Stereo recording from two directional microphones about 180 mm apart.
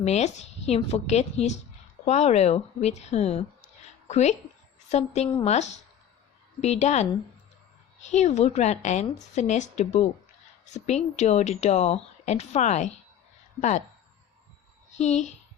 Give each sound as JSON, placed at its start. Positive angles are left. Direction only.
{"t": 0.0, "sound": "a woman's voice", "side_deg": 35}
{"t": 14.9, "sound": "a woman's voice", "side_deg": 40}